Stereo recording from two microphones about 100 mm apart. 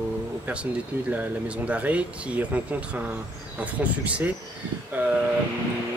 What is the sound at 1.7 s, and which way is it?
Speech, 15° right (ahead or behind).